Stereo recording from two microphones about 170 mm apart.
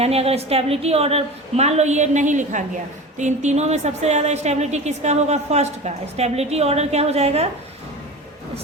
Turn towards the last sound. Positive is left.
turn(degrees=-40)  # may be behind; listen again after turning